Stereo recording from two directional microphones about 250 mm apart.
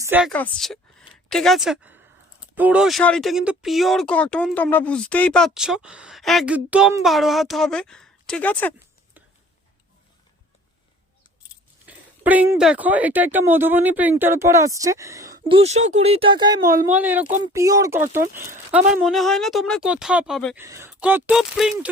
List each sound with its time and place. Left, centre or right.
0.0 s speech: centre
11.9 s speech: centre
15.4 s speech: right; by 17.2 s centre
17.2 s speech: right
17.5 s speech: centre
20.7 s speech: centre